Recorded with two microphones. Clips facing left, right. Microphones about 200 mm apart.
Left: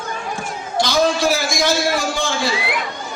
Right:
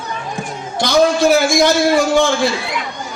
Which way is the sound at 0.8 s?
55° right (ahead or behind).